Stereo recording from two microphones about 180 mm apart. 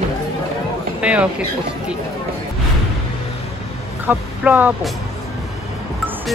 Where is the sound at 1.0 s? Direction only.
5° right (ahead or behind).